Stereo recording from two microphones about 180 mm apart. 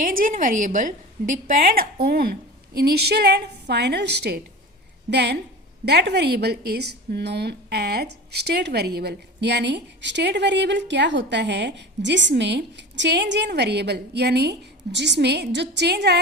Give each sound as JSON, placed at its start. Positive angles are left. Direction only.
{"t": 0.0, "sound": "a woman's voice", "side_deg": -50}